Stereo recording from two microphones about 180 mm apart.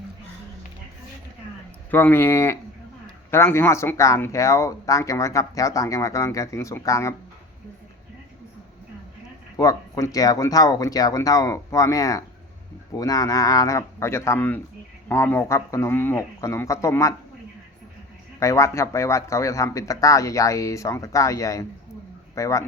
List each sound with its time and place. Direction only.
1.9 s speech: 10° left (ahead or behind)
9.6 s speech: 20° left (ahead or behind)
18.3 s speech: 15° left (ahead or behind)